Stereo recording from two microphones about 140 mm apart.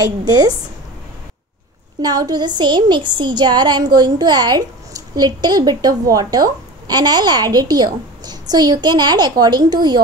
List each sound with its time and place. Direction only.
2.0 s a woman's voice: 30° right (ahead or behind)